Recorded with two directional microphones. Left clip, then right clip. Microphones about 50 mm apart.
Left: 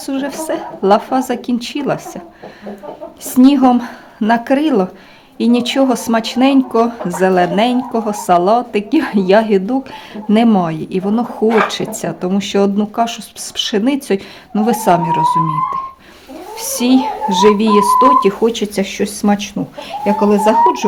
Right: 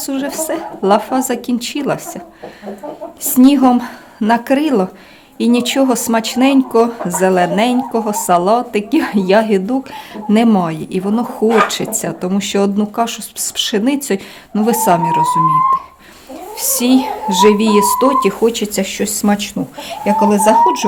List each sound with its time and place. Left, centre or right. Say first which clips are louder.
0.0 s speech: right 1 dB; left
3.2 s a woman's voice: even; left
18.3 s a woman's voice: even; left